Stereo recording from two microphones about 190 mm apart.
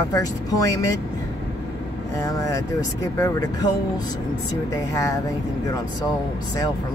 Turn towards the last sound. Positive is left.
turn(degrees=20)  # may be behind; listen again after turning